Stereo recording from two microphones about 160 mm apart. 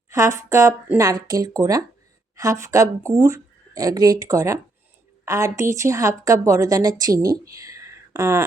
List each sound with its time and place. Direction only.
0.1 s a woman's voice: 20° right (ahead or behind)